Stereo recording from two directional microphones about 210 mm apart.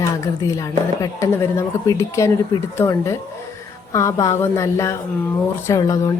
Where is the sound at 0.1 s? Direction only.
15° left (ahead or behind).